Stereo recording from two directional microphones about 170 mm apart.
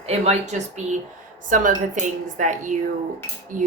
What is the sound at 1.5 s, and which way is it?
A woman's voice, 50° right (ahead or behind).